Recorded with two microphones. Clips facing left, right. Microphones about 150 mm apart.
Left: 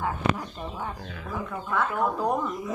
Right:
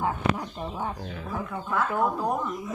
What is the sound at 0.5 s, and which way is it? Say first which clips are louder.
Speech: right 2 dB; 20° right (ahead or behind).